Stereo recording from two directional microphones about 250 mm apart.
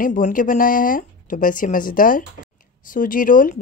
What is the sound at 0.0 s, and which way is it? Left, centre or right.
Speech, left.